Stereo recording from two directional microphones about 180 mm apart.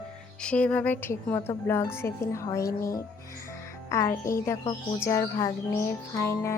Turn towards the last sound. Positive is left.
turn(degrees=15)  # may be behind; listen again after turning